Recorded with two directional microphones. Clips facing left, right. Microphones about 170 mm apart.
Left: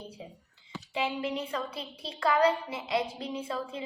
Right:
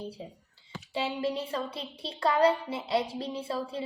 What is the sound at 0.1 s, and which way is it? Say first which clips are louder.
Speech: right 2 dB; 35° right (ahead or behind).